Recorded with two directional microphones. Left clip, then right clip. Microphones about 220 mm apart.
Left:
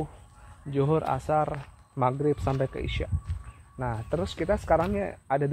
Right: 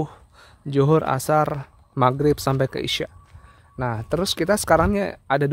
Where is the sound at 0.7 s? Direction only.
60° right (ahead or behind).